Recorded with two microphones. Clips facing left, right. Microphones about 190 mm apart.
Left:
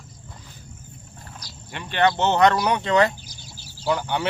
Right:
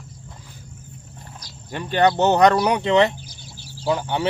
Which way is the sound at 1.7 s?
40° right (ahead or behind).